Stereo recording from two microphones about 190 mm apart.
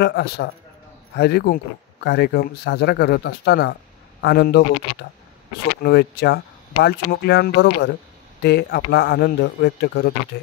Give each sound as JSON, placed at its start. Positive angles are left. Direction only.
{"t": 0.0, "sound": "speech", "side_deg": 60}